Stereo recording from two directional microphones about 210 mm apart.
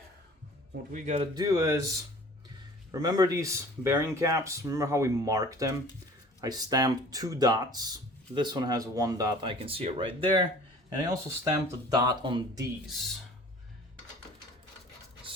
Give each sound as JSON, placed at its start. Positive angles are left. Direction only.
{"t": 0.9, "sound": "speech", "side_deg": -30}
{"t": 1.4, "sound": "speech", "side_deg": -15}
{"t": 12.9, "sound": "speech", "side_deg": 0}